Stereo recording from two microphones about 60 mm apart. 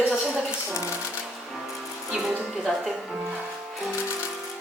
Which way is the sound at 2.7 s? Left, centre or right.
Centre.